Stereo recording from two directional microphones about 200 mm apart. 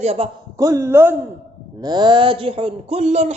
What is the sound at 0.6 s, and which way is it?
Speech, 15° right (ahead or behind).